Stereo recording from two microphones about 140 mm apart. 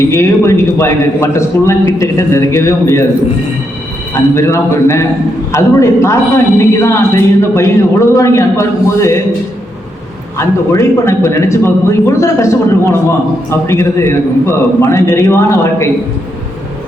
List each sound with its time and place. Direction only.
0.1 s a man's voice: 20° left (ahead or behind)
4.4 s a man's voice: 20° left (ahead or behind)
10.3 s a man's voice: 20° left (ahead or behind)